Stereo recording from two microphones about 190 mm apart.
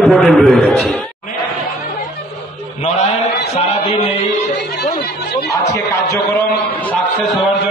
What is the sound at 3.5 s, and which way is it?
Music, 35° left (ahead or behind).